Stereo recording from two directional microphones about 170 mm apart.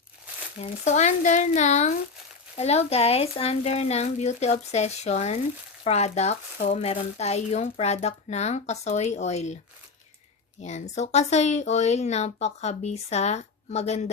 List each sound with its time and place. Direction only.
0.6 s speech: 45° left (ahead or behind)
10.6 s speech: 40° left (ahead or behind)